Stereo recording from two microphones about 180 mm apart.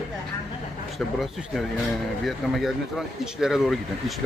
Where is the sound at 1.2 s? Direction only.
Centre (ahead or behind).